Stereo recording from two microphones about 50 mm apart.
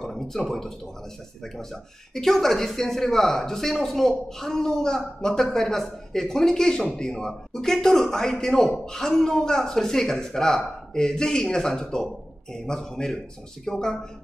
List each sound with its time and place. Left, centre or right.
0.0 s speech: centre